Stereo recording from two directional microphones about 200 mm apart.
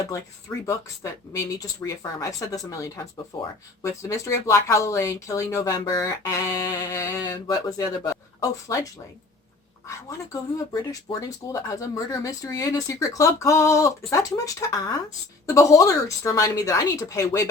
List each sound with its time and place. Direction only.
0.0 s speech: 15° left (ahead or behind)
10.7 s speech: 15° left (ahead or behind)